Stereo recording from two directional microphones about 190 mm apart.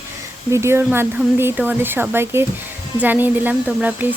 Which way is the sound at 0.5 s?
15° right (ahead or behind).